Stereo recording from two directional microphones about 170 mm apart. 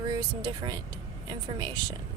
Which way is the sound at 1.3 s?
25° right (ahead or behind).